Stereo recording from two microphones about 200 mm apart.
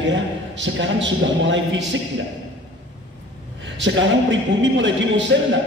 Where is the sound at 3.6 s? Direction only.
65° right (ahead or behind).